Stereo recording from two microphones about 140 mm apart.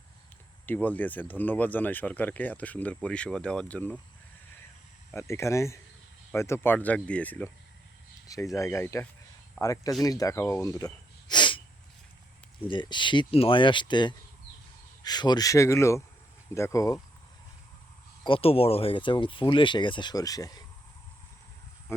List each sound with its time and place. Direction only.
0.6 s speech: 10° left (ahead or behind)
5.1 s speech: 20° left (ahead or behind)
8.3 s speech: 25° left (ahead or behind)
12.6 s speech: 35° left (ahead or behind)
18.2 s speech: 40° left (ahead or behind)